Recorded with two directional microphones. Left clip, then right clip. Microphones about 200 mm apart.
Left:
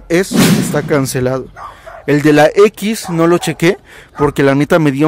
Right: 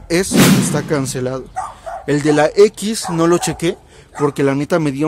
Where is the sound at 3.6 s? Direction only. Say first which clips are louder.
Left 7 dB; 25° left (ahead or behind).